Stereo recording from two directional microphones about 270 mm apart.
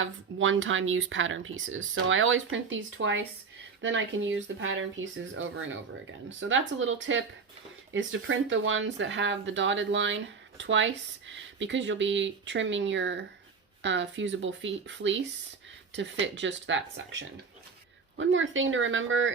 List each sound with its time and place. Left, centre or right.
0.0 s speech: right